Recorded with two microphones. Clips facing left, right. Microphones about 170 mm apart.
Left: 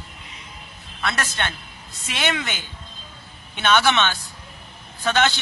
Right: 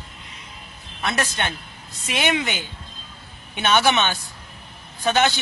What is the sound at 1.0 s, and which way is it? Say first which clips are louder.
Speech: right 2 dB; 15° right (ahead or behind).